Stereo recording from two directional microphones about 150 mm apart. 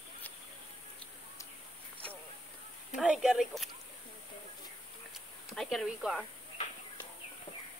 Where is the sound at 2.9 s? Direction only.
5° right (ahead or behind).